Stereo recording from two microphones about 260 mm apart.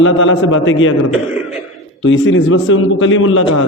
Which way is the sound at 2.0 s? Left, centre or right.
Left.